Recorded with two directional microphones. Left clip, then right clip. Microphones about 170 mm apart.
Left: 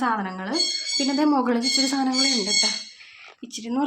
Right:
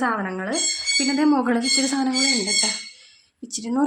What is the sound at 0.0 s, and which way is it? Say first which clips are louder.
Speech: right 1 dB; 30° right (ahead or behind).